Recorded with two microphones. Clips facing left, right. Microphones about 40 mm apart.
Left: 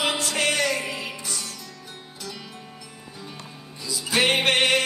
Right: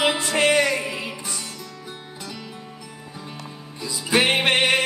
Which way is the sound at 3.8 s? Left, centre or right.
Right.